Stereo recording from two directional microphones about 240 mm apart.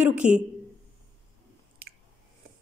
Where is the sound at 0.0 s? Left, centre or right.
Centre.